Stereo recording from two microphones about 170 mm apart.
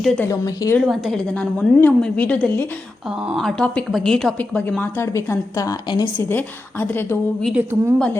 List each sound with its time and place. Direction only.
0.0 s a woman's voice: 5° left (ahead or behind)
0.3 s a woman's voice: 20° left (ahead or behind)
0.9 s a woman's voice: centre (ahead or behind)
7.4 s a woman's voice: 10° right (ahead or behind)
7.9 s a woman's voice: 5° left (ahead or behind)